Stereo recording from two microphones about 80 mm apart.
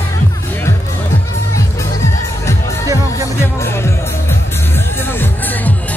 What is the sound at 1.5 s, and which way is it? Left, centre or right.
Music, left.